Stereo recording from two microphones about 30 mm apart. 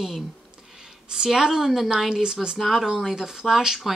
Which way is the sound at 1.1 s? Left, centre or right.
Centre.